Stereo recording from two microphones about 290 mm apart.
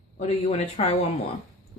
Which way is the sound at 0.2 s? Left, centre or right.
Left.